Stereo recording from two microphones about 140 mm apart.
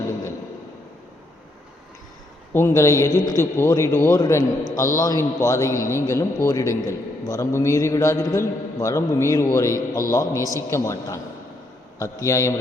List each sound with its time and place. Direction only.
2.5 s a man's voice: 15° left (ahead or behind)